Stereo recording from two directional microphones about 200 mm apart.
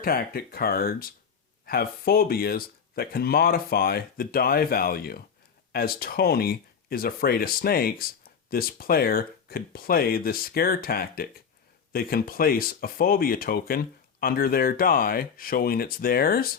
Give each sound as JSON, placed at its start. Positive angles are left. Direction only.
{"t": 0.0, "sound": "speech", "side_deg": 45}